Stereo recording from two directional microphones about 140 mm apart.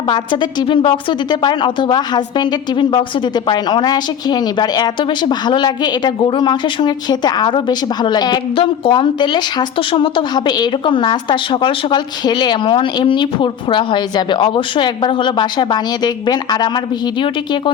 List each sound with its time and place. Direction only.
0.1 s a woman's voice: 35° left (ahead or behind)